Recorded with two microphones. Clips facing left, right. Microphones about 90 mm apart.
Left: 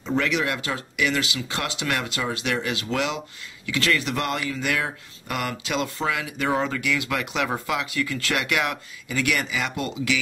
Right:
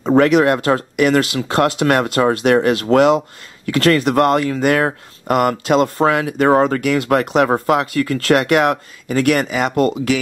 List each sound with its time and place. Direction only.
0.0 s speech: 45° right (ahead or behind)